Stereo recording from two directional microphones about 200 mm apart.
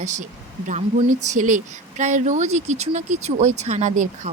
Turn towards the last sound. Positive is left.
turn(degrees=-40)  # may be behind; listen again after turning